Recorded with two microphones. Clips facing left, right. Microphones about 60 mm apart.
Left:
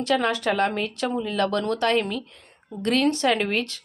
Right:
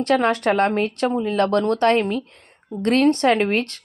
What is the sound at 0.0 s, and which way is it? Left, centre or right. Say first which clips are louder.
Speech: right 4 dB; right.